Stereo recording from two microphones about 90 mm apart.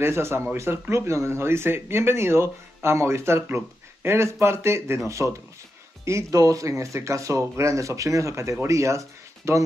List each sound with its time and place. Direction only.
0.0 s speech: 30° right (ahead or behind)